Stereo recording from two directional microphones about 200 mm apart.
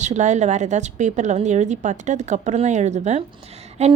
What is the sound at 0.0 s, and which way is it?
A woman's voice, 35° right (ahead or behind).